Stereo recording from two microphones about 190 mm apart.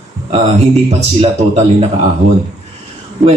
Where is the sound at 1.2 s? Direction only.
35° right (ahead or behind).